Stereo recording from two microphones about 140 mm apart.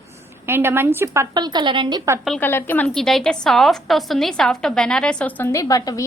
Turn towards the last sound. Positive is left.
turn(degrees=25)  # may be behind; listen again after turning